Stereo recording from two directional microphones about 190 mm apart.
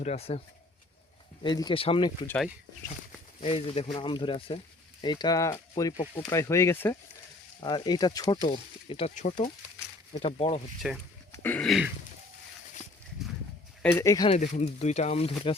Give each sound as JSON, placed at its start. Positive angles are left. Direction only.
{"t": 0.0, "sound": "speech", "side_deg": 35}
{"t": 1.4, "sound": "speech", "side_deg": 25}
{"t": 2.2, "sound": "speech", "side_deg": 10}
{"t": 3.4, "sound": "speech", "side_deg": 30}
{"t": 10.2, "sound": "speech", "side_deg": 30}
{"t": 10.8, "sound": "speech", "side_deg": -5}
{"t": 11.3, "sound": "a sound", "side_deg": 10}
{"t": 13.8, "sound": "speech", "side_deg": 15}
{"t": 14.3, "sound": "speech", "side_deg": 35}